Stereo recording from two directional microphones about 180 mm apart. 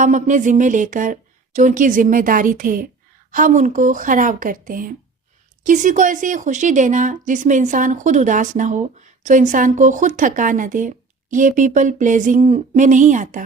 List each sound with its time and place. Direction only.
0.0 s speech: 45° right (ahead or behind)